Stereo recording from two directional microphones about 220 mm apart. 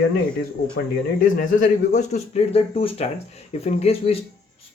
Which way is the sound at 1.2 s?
40° left (ahead or behind).